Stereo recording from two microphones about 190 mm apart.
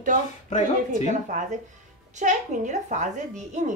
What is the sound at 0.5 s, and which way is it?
Speech, 40° left (ahead or behind).